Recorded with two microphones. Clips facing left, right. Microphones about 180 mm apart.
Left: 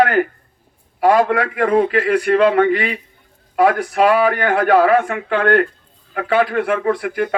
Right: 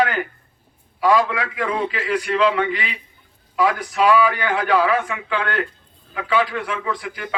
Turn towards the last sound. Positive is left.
turn(degrees=55)  # may be behind; listen again after turning